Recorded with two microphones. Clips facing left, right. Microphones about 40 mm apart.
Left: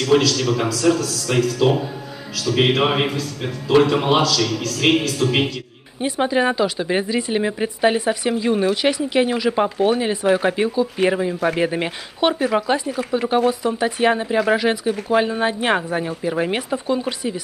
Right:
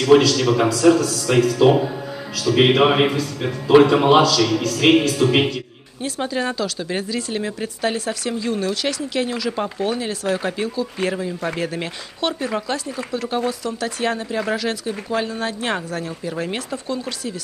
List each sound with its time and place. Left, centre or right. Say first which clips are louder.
0.0 s a man's voice: right 3 dB; centre
6.0 s speech: left 5 dB; left